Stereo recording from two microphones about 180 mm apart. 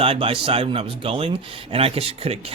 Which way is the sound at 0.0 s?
30° right (ahead or behind).